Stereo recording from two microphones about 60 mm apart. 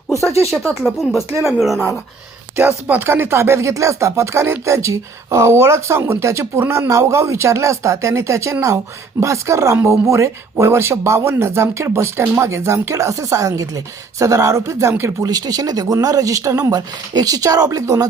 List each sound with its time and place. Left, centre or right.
0.1 s speech: left
0.8 s speech: centre
2.6 s speech: right
3.0 s speech: right
6.2 s speech: right
15.2 s speech: right